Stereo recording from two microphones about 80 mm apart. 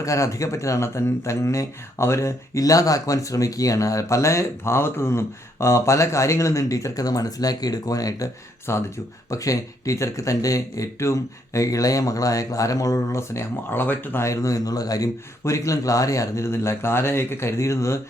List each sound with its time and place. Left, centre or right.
0.0 s speech: left
8.7 s speech: left
13.8 s speech: left
14.3 s speech: left